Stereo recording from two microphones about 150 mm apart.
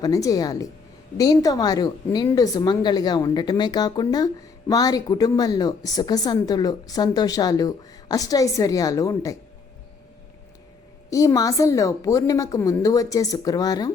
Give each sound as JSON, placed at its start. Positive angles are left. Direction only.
{"t": 0.0, "sound": "a woman's voice", "side_deg": 25}
{"t": 11.1, "sound": "a woman's voice", "side_deg": 20}